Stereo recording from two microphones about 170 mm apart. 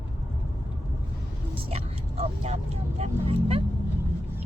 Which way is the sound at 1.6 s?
35° right (ahead or behind).